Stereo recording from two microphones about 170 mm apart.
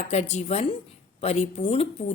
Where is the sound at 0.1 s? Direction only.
40° left (ahead or behind).